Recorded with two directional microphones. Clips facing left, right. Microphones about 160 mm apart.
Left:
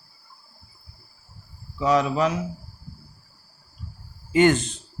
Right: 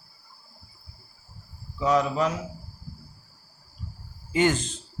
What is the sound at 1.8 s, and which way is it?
Speech, 80° left.